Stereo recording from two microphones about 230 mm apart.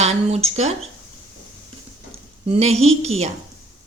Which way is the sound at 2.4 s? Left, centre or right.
Right.